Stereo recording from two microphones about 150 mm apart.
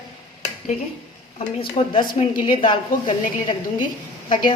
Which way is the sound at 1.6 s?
35° left (ahead or behind).